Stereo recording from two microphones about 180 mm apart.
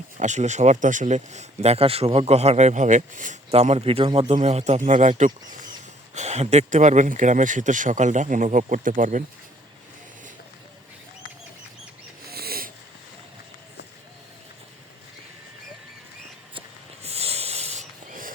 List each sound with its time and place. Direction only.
0.2 s speech: 40° right (ahead or behind)
12.3 s wheeze: 60° right (ahead or behind)
16.6 s a sound: 35° right (ahead or behind)